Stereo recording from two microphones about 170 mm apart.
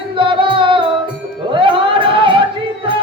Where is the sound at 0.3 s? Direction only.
30° right (ahead or behind).